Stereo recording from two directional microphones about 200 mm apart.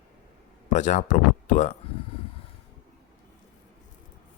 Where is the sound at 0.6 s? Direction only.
40° left (ahead or behind).